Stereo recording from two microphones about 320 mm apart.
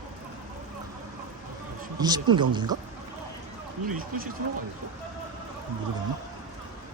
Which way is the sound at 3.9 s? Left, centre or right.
Right.